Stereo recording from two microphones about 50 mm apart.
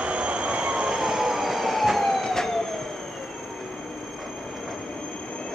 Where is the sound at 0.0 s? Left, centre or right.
Right; by 2.2 s centre.